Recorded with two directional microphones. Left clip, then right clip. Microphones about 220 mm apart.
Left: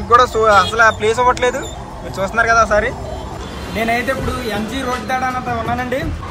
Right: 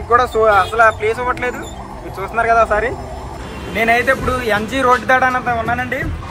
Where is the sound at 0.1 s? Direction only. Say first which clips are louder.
Left 2 dB; centre (ahead or behind).